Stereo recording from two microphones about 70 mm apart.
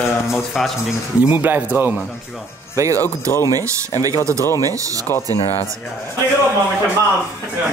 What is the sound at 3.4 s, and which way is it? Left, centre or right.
Speech, right.